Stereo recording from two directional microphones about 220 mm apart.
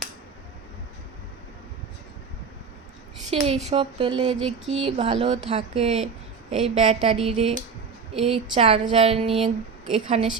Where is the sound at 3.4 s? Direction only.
25° right (ahead or behind).